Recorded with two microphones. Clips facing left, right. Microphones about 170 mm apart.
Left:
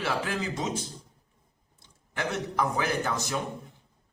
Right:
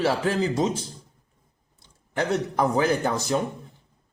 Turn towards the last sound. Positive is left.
turn(degrees=-30)  # may be behind; listen again after turning